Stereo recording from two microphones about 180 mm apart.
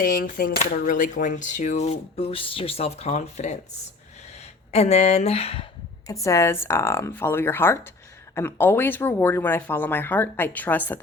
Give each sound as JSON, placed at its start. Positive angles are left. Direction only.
{"t": 0.0, "sound": "speech", "side_deg": 50}
{"t": 4.7, "sound": "speech", "side_deg": 35}
{"t": 6.2, "sound": "speech", "side_deg": 15}